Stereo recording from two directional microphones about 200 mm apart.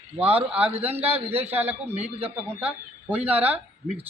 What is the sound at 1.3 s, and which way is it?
Speech, 30° right (ahead or behind).